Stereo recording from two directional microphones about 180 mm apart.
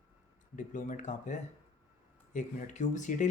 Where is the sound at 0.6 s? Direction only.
45° left (ahead or behind).